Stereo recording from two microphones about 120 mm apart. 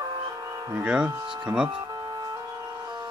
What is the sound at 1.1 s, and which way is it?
Speech, 35° right (ahead or behind).